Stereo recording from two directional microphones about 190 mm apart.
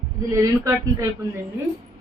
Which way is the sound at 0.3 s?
15° right (ahead or behind).